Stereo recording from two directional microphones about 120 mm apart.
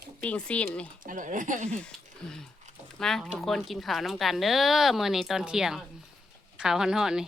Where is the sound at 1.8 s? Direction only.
5° left (ahead or behind).